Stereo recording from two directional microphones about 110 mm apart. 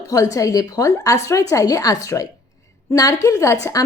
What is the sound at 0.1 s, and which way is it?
A woman's voice, 30° left (ahead or behind).